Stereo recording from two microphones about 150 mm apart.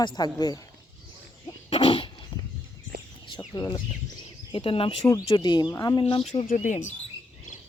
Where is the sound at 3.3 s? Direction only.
30° left (ahead or behind).